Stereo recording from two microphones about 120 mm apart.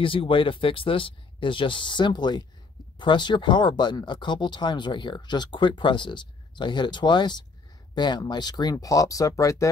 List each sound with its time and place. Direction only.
0.0 s speech: 45° left (ahead or behind); by 9.7 s 25° left (ahead or behind)